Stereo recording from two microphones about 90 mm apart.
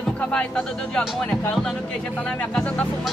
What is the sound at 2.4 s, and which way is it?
Speech, 15° left (ahead or behind).